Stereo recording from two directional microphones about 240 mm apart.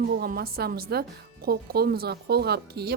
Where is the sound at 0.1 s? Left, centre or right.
Right.